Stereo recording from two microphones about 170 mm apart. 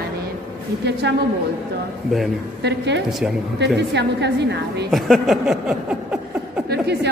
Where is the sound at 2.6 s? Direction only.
85° right.